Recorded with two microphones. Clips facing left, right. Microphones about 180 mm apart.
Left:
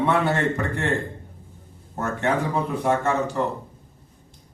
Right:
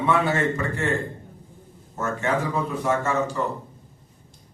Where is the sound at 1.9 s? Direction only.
60° left (ahead or behind).